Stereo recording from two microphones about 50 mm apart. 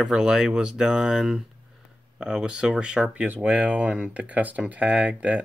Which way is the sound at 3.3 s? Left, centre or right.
Right.